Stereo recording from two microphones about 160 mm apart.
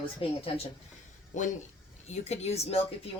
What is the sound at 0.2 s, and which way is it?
Speech, 35° left (ahead or behind).